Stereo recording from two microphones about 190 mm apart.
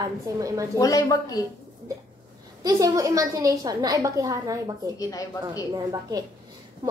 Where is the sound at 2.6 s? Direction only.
20° right (ahead or behind).